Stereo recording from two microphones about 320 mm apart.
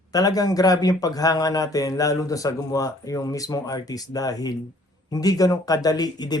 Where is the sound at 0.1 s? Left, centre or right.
Centre.